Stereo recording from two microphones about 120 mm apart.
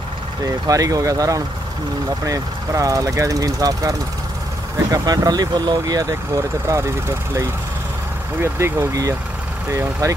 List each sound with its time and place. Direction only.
0.7 s speech: 30° right (ahead or behind)
4.9 s speech: 30° right (ahead or behind)